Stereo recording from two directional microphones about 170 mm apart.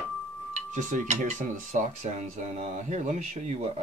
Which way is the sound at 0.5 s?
45° right (ahead or behind).